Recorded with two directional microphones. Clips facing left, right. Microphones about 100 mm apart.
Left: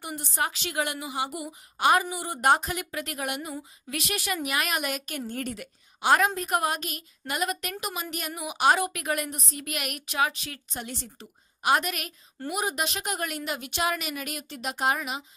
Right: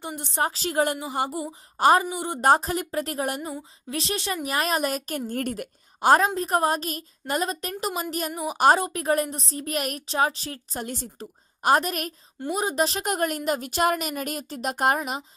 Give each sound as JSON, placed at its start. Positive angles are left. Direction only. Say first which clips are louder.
{"t": 0.0, "sound": "a woman's voice", "louder": "right 3 dB", "side_deg": -25}
{"t": 2.0, "sound": "a woman's voice", "louder": "right 4 dB", "side_deg": -20}
{"t": 2.4, "sound": "a woman's voice", "louder": "right 3 dB", "side_deg": -35}
{"t": 5.3, "sound": "a woman's voice", "louder": "right 5 dB", "side_deg": -50}